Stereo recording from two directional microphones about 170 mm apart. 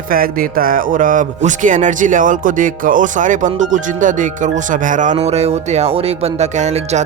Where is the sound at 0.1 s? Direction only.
60° right (ahead or behind).